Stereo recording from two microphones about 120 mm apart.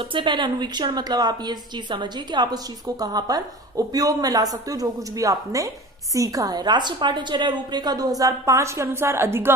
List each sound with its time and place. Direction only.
0.0 s a woman's voice: 45° right (ahead or behind); by 9.5 s 20° right (ahead or behind)